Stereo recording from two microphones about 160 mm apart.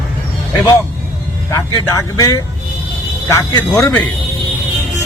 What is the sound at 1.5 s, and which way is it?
Speech, 20° left (ahead or behind).